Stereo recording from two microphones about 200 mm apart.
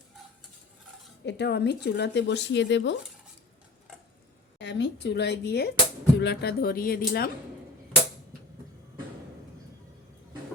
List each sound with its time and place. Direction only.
1.2 s speech: 60° left (ahead or behind)
4.5 s speech: 60° left (ahead or behind)